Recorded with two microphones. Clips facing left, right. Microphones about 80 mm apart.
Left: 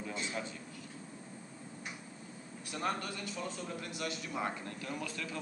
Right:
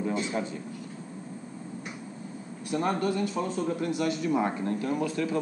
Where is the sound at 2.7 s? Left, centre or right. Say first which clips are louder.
Right 10 dB; right.